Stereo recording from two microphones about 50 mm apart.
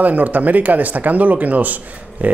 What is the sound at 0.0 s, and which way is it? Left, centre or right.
Speech, right.